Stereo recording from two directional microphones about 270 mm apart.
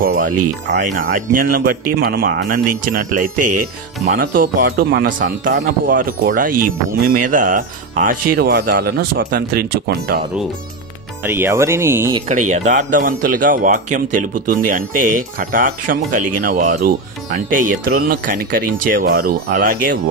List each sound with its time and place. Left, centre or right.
0.0 s speech: right
11.2 s speech: centre
12.3 s speech: right